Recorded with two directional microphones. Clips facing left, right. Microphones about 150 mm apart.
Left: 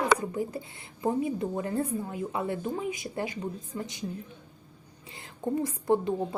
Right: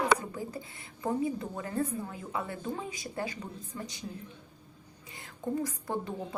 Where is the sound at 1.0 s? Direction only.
20° left (ahead or behind).